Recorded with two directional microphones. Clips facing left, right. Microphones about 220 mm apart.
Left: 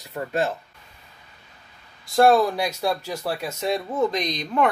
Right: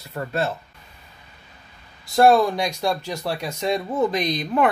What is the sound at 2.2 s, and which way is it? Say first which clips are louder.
Speech: right 1 dB; centre (ahead or behind).